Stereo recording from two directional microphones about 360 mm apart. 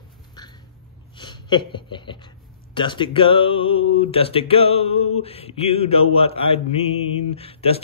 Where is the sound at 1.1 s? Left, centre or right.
Centre.